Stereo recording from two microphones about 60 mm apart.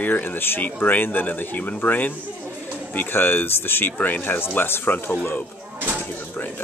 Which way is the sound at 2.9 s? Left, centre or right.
Left.